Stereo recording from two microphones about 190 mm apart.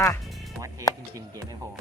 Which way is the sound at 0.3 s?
Centre (ahead or behind).